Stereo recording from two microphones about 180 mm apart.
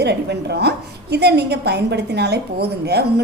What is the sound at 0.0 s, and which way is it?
A woman's voice, 65° right (ahead or behind).